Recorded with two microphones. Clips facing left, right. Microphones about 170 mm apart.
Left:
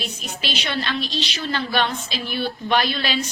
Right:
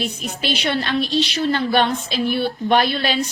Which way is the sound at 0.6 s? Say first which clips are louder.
Right 5 dB; 45° right (ahead or behind).